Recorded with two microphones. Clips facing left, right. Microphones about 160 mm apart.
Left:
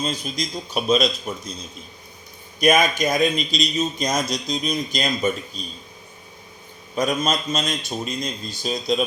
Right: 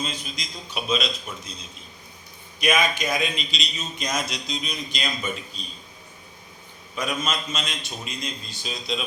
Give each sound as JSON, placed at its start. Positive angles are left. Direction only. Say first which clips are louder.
{"t": 0.0, "sound": "a man's voice", "louder": "left 6 dB", "side_deg": 40}
{"t": 2.6, "sound": "a man's voice", "louder": "left 5 dB", "side_deg": 40}
{"t": 6.9, "sound": "a man's voice", "louder": "left 6 dB", "side_deg": 40}